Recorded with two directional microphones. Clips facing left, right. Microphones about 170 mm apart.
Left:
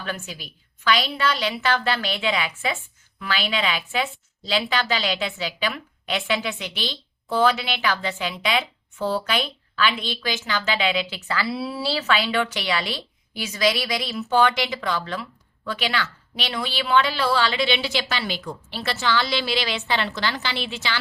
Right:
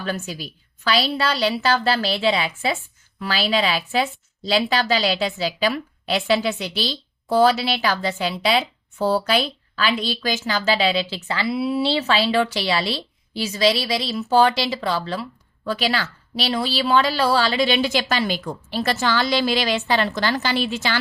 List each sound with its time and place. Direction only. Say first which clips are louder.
0.0 s a woman's voice: right 5 dB; 35° right (ahead or behind)